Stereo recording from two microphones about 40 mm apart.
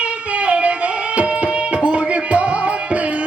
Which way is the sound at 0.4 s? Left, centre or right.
Right.